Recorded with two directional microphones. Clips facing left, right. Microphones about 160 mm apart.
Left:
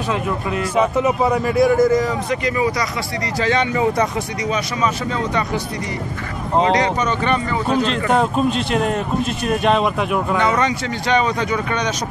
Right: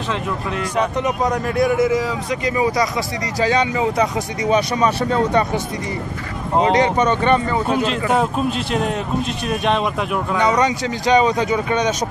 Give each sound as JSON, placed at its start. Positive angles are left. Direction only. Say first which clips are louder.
{"t": 0.7, "sound": "a man's voice", "louder": "left 3 dB", "side_deg": 5}
{"t": 3.3, "sound": "speech", "louder": "right 1 dB", "side_deg": -15}
{"t": 4.6, "sound": "speech", "louder": "right 4 dB", "side_deg": -35}
{"t": 6.8, "sound": "speech", "louder": "right 3 dB", "side_deg": -30}
{"t": 7.6, "sound": "a man's voice", "louder": "left 1 dB", "side_deg": -5}
{"t": 10.3, "sound": "speech", "louder": "right 3 dB", "side_deg": -15}